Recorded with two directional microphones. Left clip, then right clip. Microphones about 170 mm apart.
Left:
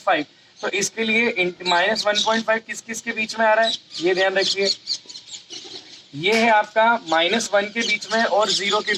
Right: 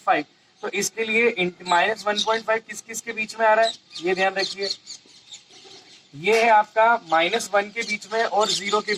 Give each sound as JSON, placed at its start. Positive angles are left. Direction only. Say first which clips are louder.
{"t": 0.0, "sound": "speech", "louder": "left 1 dB", "side_deg": 25}
{"t": 6.2, "sound": "speech", "louder": "even", "side_deg": 25}